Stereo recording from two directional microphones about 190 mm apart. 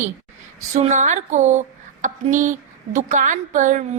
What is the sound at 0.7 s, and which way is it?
A woman's voice, 40° right (ahead or behind).